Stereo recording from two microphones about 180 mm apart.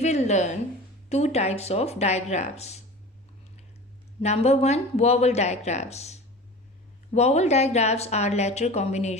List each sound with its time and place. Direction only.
0.0 s speech: 40° left (ahead or behind)
4.2 s speech: 40° left (ahead or behind)